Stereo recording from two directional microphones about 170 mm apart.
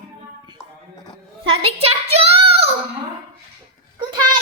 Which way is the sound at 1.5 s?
35° right (ahead or behind).